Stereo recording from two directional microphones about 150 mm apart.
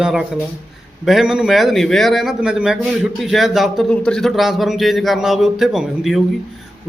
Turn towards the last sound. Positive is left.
turn(degrees=0)  # may be behind; listen again after turning